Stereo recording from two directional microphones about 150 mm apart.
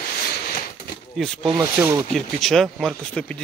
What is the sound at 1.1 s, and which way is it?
Speech, 5° left (ahead or behind).